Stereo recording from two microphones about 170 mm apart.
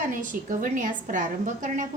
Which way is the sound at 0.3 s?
50° right (ahead or behind).